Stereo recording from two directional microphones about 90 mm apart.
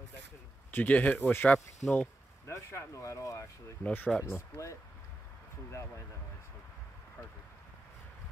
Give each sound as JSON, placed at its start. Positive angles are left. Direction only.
{"t": 0.7, "sound": "speech", "side_deg": 20}
{"t": 2.4, "sound": "speech", "side_deg": 30}
{"t": 3.8, "sound": "speech", "side_deg": 20}
{"t": 4.2, "sound": "speech", "side_deg": 35}